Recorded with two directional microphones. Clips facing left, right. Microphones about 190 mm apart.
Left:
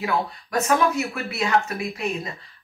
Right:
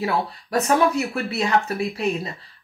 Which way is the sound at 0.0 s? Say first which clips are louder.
Right 1 dB; 35° right (ahead or behind).